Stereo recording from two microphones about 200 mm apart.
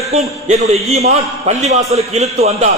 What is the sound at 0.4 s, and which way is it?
A man's voice, 30° right (ahead or behind).